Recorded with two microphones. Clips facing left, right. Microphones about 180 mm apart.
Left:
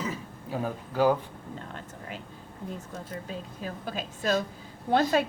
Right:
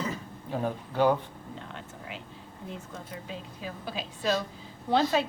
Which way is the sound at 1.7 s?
45° left (ahead or behind).